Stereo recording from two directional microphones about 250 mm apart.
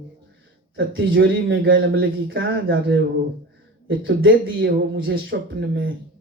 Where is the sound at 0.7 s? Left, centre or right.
Right.